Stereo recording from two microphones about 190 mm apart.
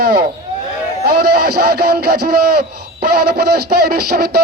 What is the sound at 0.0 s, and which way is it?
Speech, 55° right (ahead or behind).